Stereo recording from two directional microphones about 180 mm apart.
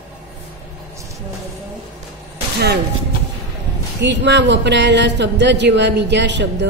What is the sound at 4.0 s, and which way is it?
Speech, 75° right (ahead or behind).